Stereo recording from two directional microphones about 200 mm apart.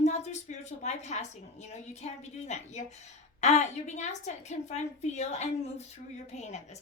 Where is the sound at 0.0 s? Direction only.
35° left (ahead or behind).